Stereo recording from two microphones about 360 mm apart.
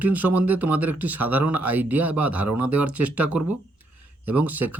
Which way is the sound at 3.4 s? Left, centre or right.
Right.